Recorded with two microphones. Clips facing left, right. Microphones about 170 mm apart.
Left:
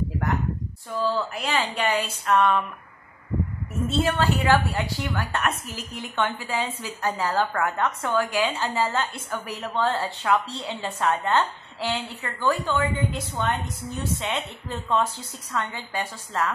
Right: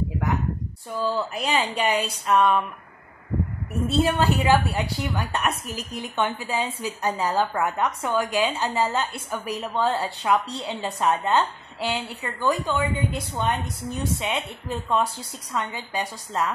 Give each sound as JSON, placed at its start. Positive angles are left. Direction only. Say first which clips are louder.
{"t": 0.9, "sound": "a woman's voice", "louder": "even", "side_deg": -15}
{"t": 4.0, "sound": "a woman's voice", "louder": "right 1 dB", "side_deg": -15}